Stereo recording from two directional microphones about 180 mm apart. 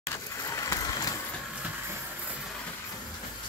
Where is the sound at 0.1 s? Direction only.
20° left (ahead or behind).